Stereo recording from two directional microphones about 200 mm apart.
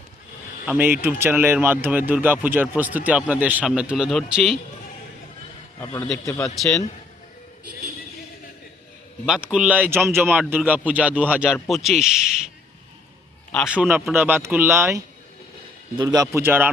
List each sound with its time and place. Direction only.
0.6 s a man's voice: 10° right (ahead or behind)
5.8 s a man's voice: 15° left (ahead or behind)
6.6 s speech: centre (ahead or behind)
9.2 s a man's voice: 5° right (ahead or behind)
13.7 s a man's voice: 10° right (ahead or behind)